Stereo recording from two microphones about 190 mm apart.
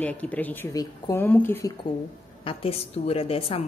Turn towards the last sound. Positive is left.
turn(degrees=30)  # may be behind; listen again after turning